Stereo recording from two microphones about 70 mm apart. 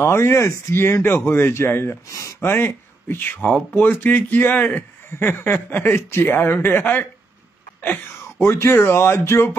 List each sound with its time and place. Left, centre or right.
0.0 s speech: left
2.0 s speech: left
2.4 s speech: left
3.3 s speech: centre
3.7 s speech: left
8.2 s speech: left